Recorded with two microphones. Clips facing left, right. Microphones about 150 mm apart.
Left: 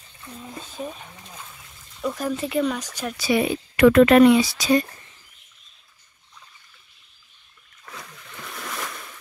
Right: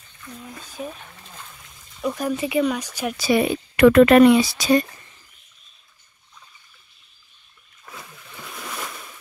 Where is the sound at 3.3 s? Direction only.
55° right (ahead or behind).